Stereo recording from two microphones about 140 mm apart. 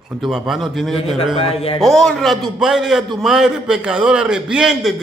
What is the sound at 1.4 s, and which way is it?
Speech, 45° left (ahead or behind).